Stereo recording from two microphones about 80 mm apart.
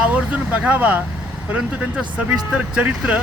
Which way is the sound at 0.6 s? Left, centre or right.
Centre.